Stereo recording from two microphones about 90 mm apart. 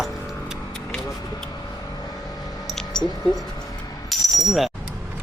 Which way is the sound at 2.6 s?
5° left (ahead or behind).